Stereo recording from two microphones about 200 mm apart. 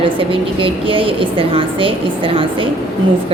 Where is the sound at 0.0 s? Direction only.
25° right (ahead or behind).